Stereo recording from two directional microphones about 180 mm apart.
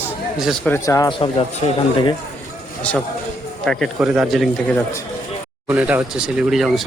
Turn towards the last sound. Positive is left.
turn(degrees=0)  # may be behind; listen again after turning